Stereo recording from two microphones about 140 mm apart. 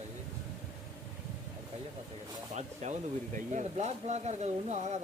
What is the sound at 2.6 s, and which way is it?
Speech, 55° right (ahead or behind).